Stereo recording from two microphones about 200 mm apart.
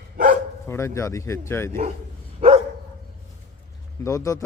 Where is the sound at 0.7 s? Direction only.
15° left (ahead or behind).